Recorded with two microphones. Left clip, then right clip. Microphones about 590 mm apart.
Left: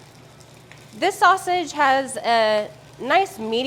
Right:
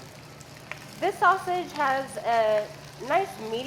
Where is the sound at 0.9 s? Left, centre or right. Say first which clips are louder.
Left 6 dB; left.